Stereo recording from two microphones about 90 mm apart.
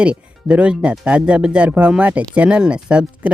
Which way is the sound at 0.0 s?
15° right (ahead or behind).